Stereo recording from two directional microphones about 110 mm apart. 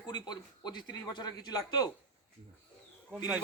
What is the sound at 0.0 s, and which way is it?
A man's voice, 40° left (ahead or behind).